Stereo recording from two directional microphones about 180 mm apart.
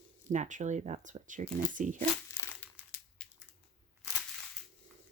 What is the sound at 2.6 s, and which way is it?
Crumpling, 10° left (ahead or behind).